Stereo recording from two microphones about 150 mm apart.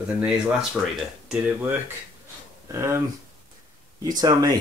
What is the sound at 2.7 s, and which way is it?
Speech, 20° right (ahead or behind).